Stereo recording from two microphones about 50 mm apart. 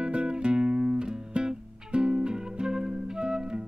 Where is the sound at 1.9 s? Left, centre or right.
Right.